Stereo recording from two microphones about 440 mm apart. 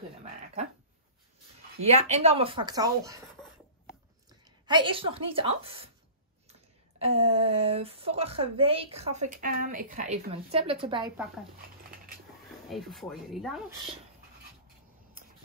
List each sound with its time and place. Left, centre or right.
1.8 s speech: centre
4.6 s speech: centre
7.0 s speech: centre
12.6 s speech: centre